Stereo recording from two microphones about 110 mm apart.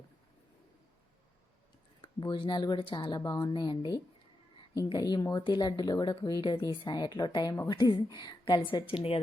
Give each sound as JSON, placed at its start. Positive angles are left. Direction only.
{"t": 2.0, "sound": "speech", "side_deg": 50}
{"t": 7.7, "sound": "speech", "side_deg": 45}